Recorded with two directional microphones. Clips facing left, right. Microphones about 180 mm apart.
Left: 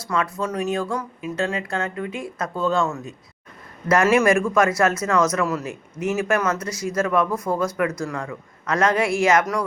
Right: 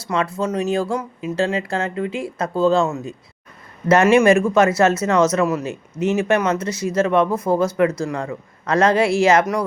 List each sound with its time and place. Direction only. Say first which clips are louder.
0.1 s speech: right 3 dB; 25° right (ahead or behind)